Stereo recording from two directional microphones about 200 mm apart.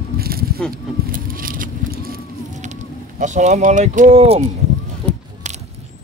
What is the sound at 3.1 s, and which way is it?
Speech, 35° right (ahead or behind).